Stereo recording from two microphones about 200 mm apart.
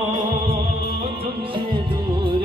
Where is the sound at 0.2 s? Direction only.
25° right (ahead or behind).